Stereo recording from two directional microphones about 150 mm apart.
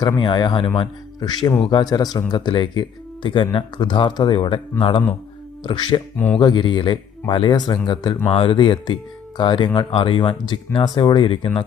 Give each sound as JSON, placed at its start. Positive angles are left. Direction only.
{"t": 0.2, "sound": "speech", "side_deg": 30}
{"t": 6.1, "sound": "speech", "side_deg": 10}
{"t": 6.4, "sound": "speech", "side_deg": 30}